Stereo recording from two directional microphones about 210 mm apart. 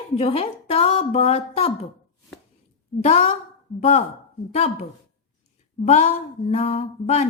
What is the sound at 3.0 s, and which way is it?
A woman's voice, 30° left (ahead or behind).